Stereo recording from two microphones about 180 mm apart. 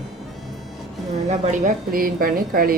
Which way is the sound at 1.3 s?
45° right (ahead or behind).